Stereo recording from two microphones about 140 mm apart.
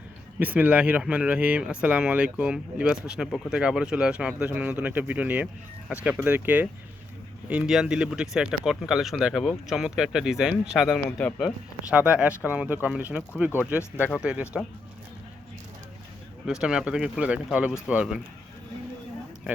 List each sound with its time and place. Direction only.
0.3 s speech: 10° right (ahead or behind)
13.9 s speech: 15° left (ahead or behind)
14.2 s speech: 5° right (ahead or behind)
16.5 s speech: 5° right (ahead or behind)